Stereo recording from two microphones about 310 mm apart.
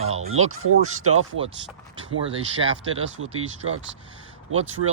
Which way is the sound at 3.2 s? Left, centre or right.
Right.